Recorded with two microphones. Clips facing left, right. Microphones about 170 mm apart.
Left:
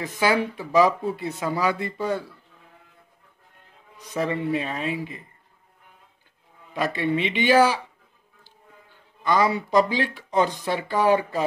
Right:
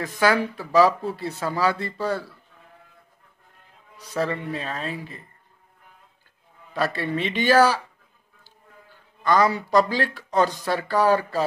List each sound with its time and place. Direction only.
0.0 s speech: 15° left (ahead or behind)
4.1 s speech: 20° left (ahead or behind)
6.7 s speech: 15° left (ahead or behind)
9.2 s speech: 20° left (ahead or behind)